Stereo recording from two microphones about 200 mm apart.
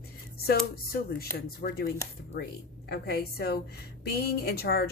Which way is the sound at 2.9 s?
50° left (ahead or behind).